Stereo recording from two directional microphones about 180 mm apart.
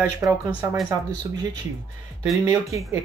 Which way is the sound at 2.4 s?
15° right (ahead or behind).